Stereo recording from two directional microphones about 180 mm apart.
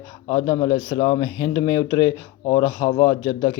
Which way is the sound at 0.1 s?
20° left (ahead or behind).